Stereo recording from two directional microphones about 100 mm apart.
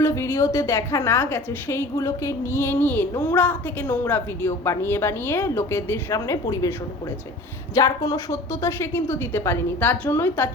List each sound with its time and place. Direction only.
0.0 s a woman's voice: 25° left (ahead or behind)
7.8 s a woman's voice: 35° left (ahead or behind)